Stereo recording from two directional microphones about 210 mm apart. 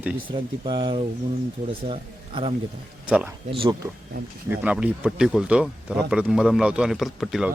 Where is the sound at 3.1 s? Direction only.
5° right (ahead or behind).